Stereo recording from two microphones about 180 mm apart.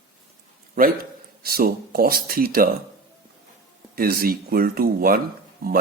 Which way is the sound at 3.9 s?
55° right (ahead or behind).